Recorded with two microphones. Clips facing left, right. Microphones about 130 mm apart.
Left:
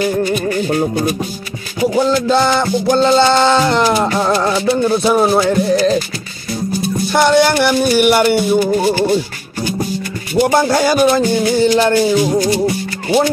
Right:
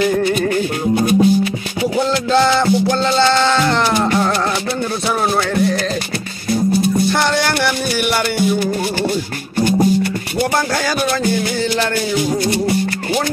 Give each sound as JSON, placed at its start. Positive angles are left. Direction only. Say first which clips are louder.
{"t": 2.0, "sound": "music", "louder": "left 1 dB", "side_deg": 10}
{"t": 7.1, "sound": "music", "louder": "left 5 dB", "side_deg": 15}
{"t": 10.5, "sound": "music", "louder": "left 6 dB", "side_deg": 20}